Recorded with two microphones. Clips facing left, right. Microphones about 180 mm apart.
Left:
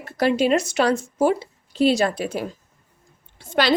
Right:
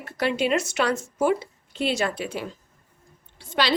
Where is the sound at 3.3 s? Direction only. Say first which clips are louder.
Left 4 dB; 50° left (ahead or behind).